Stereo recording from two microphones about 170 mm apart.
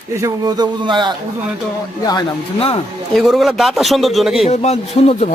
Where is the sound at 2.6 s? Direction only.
35° left (ahead or behind).